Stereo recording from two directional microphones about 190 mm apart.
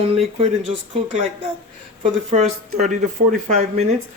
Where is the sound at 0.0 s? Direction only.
30° right (ahead or behind).